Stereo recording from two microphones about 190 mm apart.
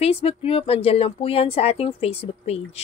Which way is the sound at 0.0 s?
30° left (ahead or behind).